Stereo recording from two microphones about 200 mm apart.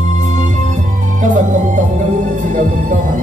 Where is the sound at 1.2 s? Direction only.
40° right (ahead or behind).